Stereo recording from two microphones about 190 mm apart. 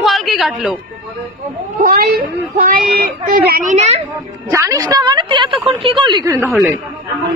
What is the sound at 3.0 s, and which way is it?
Speech, 50° right (ahead or behind).